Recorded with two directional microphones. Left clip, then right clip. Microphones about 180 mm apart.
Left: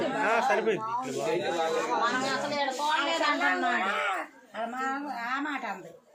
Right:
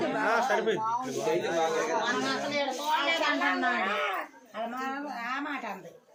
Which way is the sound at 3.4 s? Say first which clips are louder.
Left 1 dB; centre (ahead or behind).